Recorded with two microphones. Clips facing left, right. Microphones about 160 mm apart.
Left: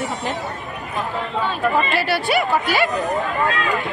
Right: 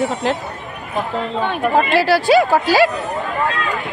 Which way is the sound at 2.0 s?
90° right.